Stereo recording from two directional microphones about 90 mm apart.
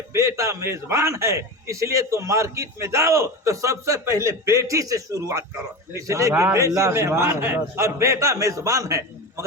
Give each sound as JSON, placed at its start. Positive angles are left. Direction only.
{"t": 0.1, "sound": "a man's voice", "side_deg": -35}